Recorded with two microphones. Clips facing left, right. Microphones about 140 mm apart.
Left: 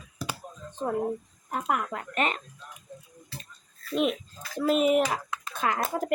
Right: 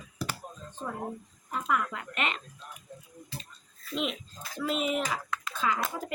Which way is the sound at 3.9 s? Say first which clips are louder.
Left 6 dB; 50° left (ahead or behind).